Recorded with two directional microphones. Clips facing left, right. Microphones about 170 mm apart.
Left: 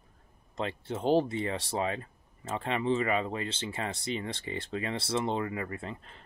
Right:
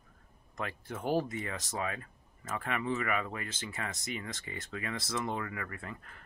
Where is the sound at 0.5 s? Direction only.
25° left (ahead or behind).